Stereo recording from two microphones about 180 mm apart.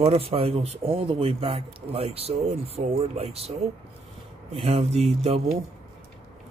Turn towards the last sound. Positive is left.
turn(degrees=-35)  # may be behind; listen again after turning